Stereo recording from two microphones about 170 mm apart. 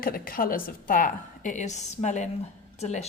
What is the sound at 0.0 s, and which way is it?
A woman's voice, 60° left (ahead or behind).